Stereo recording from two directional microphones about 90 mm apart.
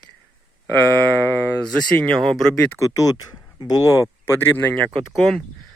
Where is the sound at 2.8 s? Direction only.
40° left (ahead or behind).